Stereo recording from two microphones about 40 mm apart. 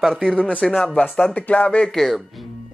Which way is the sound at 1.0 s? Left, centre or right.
Left.